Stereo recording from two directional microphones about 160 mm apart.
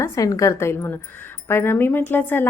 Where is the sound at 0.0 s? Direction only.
20° left (ahead or behind).